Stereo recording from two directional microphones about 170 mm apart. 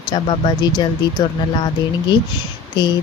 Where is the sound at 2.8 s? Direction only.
25° left (ahead or behind).